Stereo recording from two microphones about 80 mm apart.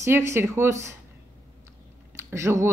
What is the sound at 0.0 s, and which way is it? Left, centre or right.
Speech, right.